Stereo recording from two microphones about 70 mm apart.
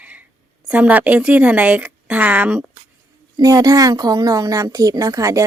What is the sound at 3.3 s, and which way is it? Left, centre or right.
A woman's voice, right.